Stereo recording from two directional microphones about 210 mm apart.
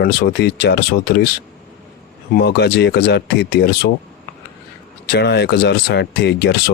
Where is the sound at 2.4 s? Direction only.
50° left (ahead or behind).